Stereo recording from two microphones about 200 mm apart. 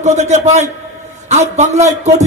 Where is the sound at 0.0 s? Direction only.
35° right (ahead or behind).